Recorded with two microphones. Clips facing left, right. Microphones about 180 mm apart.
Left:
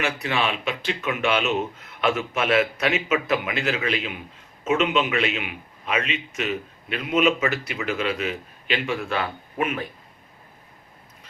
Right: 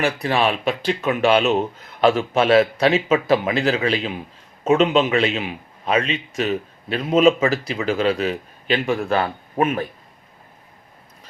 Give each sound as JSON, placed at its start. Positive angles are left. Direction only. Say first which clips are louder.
{"t": 0.0, "sound": "a man's voice", "louder": "right 5 dB", "side_deg": -35}